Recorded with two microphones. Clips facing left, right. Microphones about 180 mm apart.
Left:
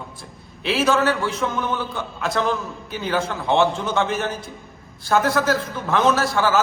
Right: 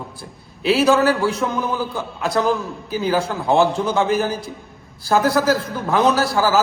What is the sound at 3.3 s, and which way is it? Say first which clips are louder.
Speech: even; centre (ahead or behind).